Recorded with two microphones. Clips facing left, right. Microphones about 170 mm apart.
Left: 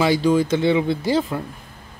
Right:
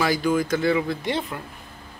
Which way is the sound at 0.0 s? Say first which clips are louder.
Left 4 dB; 25° left (ahead or behind).